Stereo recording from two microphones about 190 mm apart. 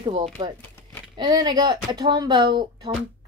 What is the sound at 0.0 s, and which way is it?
Speech, 35° right (ahead or behind).